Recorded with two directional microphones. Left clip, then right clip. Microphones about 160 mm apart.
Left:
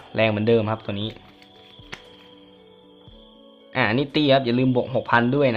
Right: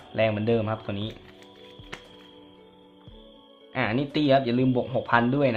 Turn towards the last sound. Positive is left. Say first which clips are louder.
# left 3 dB
turn(degrees=25)  # may be behind; listen again after turning